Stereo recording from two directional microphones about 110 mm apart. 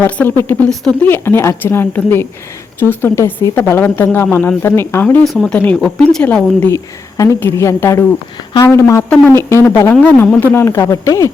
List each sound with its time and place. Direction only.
0.2 s a woman's voice: 20° left (ahead or behind)
5.2 s speech: centre (ahead or behind)
6.7 s a woman's voice: 30° left (ahead or behind)
9.0 s speech: 10° left (ahead or behind)
9.3 s a woman's voice: 25° left (ahead or behind)
10.5 s a woman's voice: 25° left (ahead or behind)